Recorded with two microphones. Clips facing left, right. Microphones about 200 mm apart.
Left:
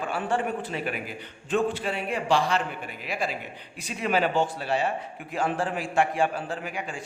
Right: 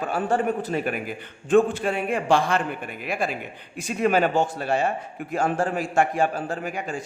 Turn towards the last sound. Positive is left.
turn(degrees=-45)  # may be behind; listen again after turning